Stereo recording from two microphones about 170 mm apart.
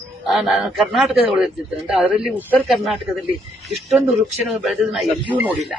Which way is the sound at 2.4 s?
10° left (ahead or behind).